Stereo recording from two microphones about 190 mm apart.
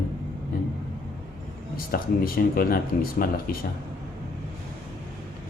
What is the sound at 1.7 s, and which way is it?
Speech, 50° left (ahead or behind).